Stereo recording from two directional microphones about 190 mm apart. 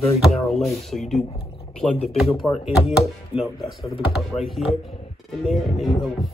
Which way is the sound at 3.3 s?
25° left (ahead or behind).